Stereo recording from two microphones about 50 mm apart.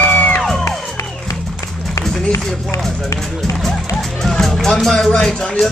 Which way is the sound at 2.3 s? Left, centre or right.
Left.